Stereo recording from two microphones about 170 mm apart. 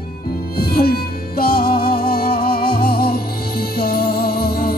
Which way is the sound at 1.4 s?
60° left (ahead or behind).